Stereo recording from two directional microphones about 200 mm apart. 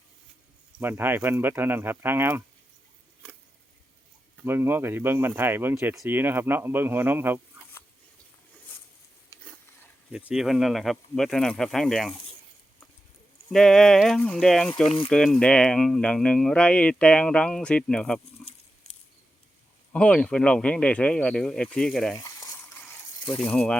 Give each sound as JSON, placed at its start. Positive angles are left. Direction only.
{"t": 0.8, "sound": "speech", "side_deg": -10}
{"t": 3.2, "sound": "a sound", "side_deg": 5}
{"t": 4.4, "sound": "speech", "side_deg": -10}
{"t": 9.3, "sound": "a sound", "side_deg": -15}
{"t": 10.1, "sound": "speech", "side_deg": -5}
{"t": 13.5, "sound": "speech", "side_deg": 5}
{"t": 14.8, "sound": "speech", "side_deg": 30}
{"t": 15.1, "sound": "speech", "side_deg": 0}
{"t": 18.4, "sound": "a sound", "side_deg": 0}
{"t": 19.9, "sound": "speech", "side_deg": 5}
{"t": 22.2, "sound": "boiling", "side_deg": 15}
{"t": 23.2, "sound": "speech", "side_deg": 10}